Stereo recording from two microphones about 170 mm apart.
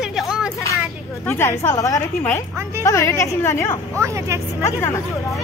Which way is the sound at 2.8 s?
15° left (ahead or behind).